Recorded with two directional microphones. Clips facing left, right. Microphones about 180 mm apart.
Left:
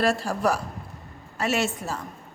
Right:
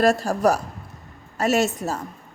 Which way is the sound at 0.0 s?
45° right (ahead or behind).